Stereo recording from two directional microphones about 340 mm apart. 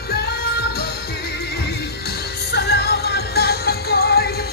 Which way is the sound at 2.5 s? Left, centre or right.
Left.